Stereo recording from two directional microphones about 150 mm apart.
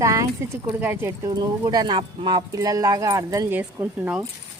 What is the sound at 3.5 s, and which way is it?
Speech, 10° right (ahead or behind).